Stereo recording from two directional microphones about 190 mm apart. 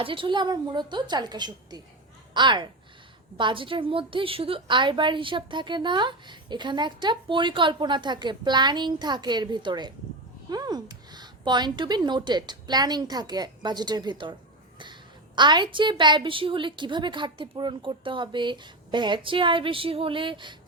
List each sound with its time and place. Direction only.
0.0 s a woman's voice: 25° right (ahead or behind)
15.4 s a woman's voice: 25° right (ahead or behind)